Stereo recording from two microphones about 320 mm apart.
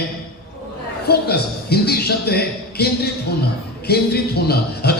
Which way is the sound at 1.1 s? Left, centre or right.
Left.